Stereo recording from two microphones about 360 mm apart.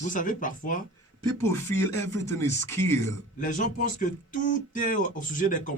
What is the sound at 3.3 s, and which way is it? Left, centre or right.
Speech, left.